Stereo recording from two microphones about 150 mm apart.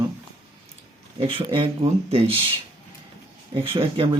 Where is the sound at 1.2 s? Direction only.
35° right (ahead or behind).